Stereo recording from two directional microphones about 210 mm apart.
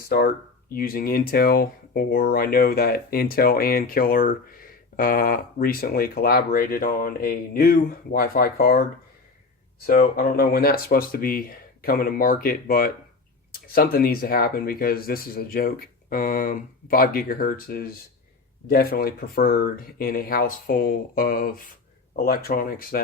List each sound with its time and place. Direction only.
0.0 s speech: 45° left (ahead or behind)
9.8 s speech: 40° left (ahead or behind)